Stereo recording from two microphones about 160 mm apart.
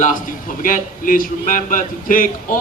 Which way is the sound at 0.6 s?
60° left (ahead or behind).